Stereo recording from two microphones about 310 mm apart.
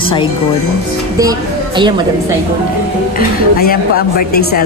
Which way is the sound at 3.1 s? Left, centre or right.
Left.